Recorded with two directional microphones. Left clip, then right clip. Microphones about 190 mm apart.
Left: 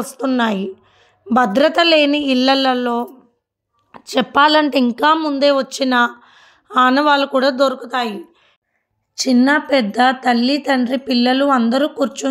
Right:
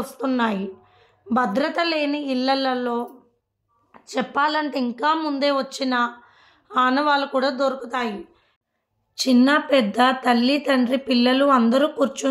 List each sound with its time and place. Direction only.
0.0 s a woman's voice: 35° left (ahead or behind)
3.9 s a woman's voice: 50° left (ahead or behind)
5.2 s a woman's voice: 30° left (ahead or behind); by 8.2 s 50° left (ahead or behind)
9.1 s a woman's voice: 30° left (ahead or behind)